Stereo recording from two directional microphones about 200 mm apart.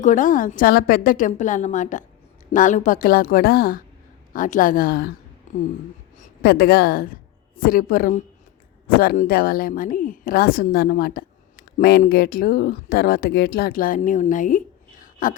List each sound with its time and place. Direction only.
0.0 s a woman's voice: 40° left (ahead or behind)
5.5 s a sound: 35° left (ahead or behind)
6.1 s a woman's voice: 45° left (ahead or behind)